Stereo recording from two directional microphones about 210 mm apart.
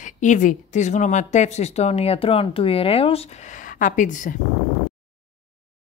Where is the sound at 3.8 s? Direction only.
35° left (ahead or behind).